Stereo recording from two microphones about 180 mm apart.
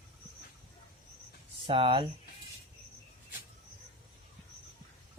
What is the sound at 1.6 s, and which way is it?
Speech, 30° right (ahead or behind).